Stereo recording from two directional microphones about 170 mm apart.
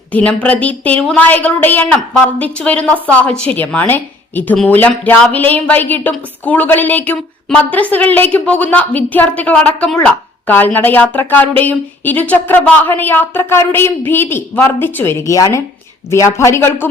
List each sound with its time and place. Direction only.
0.1 s a woman's voice: 10° left (ahead or behind)